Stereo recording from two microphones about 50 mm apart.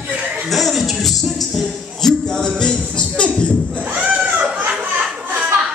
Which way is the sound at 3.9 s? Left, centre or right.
Centre.